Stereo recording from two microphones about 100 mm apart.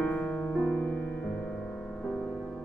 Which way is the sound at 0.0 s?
10° left (ahead or behind).